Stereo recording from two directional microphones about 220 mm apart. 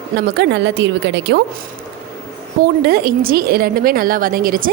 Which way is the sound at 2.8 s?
45° right (ahead or behind).